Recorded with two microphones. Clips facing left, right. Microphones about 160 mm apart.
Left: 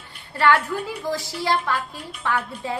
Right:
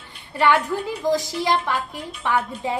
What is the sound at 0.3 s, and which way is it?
A woman's voice, 15° right (ahead or behind).